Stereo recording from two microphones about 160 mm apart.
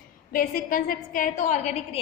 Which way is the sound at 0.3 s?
60° left (ahead or behind).